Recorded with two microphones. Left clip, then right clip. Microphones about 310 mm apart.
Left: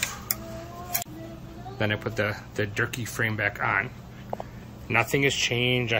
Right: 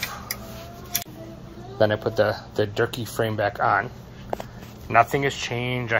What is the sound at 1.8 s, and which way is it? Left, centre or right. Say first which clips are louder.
Speech: right 7 dB; centre.